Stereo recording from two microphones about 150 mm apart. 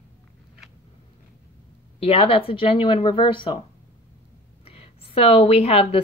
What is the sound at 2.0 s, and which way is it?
Speech, 40° left (ahead or behind).